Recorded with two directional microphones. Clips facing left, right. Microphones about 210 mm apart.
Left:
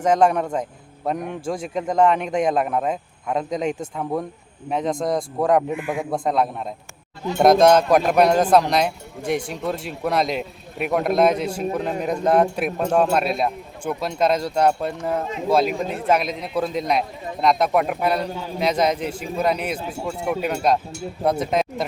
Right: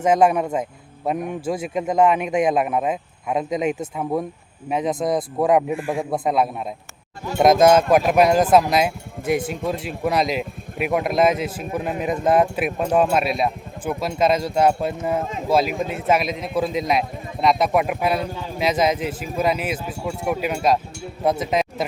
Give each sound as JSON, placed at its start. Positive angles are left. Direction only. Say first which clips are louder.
{"t": 0.0, "sound": "a man's voice", "louder": "right 1 dB", "side_deg": -5}
{"t": 5.7, "sound": "a man's voice", "louder": "right 1 dB", "side_deg": -30}
{"t": 6.1, "sound": "a man's voice", "louder": "even", "side_deg": -5}